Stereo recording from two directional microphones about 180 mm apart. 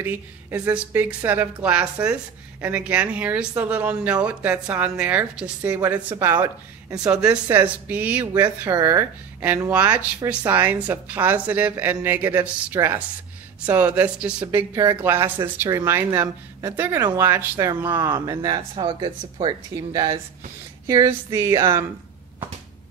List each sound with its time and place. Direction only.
0.0 s speech: 10° right (ahead or behind)
7.1 s speech: 5° right (ahead or behind)